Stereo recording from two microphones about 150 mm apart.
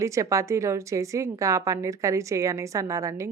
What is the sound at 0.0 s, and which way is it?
A woman's voice, 20° right (ahead or behind).